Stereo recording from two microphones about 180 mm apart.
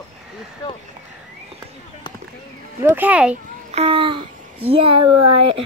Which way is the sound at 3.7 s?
30° right (ahead or behind).